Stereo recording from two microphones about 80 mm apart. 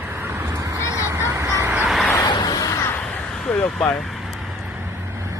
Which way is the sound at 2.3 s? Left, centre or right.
Left.